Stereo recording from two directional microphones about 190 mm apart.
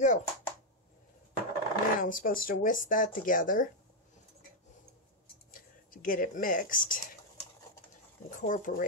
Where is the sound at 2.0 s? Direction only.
45° left (ahead or behind).